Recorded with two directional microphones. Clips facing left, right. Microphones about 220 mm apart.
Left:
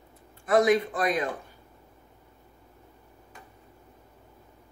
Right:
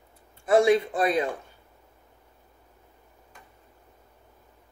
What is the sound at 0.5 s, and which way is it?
Speech, 30° right (ahead or behind).